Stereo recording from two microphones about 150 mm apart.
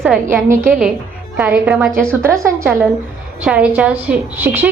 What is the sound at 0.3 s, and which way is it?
A woman's voice, 15° right (ahead or behind).